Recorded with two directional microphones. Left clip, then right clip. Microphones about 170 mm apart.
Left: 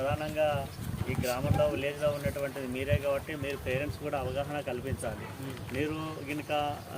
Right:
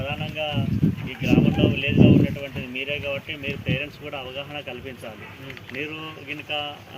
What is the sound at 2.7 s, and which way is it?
Speech, 35° left (ahead or behind).